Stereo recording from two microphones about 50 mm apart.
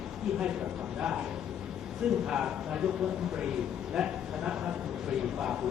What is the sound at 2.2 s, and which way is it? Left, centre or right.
Speech, centre.